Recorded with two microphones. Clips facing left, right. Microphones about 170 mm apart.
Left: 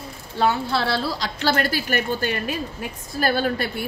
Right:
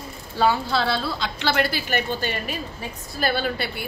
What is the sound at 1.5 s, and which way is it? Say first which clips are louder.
Speech: left 1 dB; 50° left (ahead or behind).